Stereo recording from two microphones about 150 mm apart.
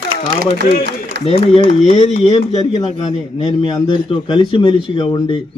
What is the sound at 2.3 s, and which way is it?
A man's voice, 30° left (ahead or behind).